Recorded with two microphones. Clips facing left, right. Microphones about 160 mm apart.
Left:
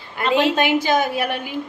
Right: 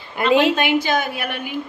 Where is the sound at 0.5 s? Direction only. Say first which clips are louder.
Left 1 dB; 40° left (ahead or behind).